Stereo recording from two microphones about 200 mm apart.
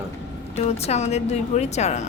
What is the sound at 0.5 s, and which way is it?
A woman's voice, 30° left (ahead or behind).